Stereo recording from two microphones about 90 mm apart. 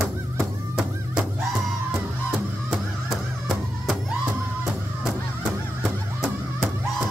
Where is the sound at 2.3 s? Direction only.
5° right (ahead or behind).